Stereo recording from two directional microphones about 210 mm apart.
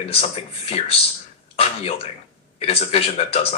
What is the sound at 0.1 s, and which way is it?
Speech, 30° left (ahead or behind).